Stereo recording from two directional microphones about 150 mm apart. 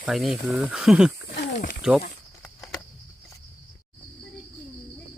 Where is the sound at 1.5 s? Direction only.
60° left (ahead or behind).